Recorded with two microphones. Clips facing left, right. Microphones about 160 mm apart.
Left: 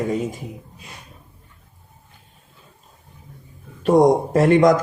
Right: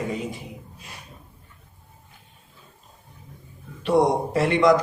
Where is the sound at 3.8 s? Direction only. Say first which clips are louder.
Left 5 dB; 45° left (ahead or behind).